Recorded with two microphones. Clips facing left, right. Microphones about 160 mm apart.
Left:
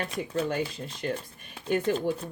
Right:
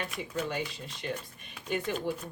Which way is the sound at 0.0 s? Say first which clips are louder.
Left 5 dB; 40° left (ahead or behind).